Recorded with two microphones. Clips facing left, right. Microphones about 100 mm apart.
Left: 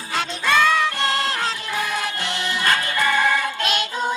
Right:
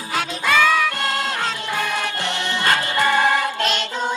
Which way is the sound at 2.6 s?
25° right (ahead or behind).